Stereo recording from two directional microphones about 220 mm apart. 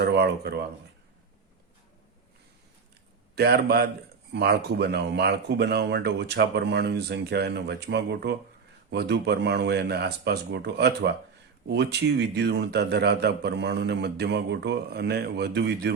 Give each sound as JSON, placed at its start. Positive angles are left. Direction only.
{"t": 0.0, "sound": "speech", "side_deg": -50}
{"t": 3.3, "sound": "speech", "side_deg": -45}